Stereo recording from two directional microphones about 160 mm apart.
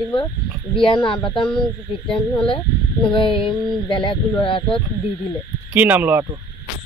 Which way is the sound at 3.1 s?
30° left (ahead or behind).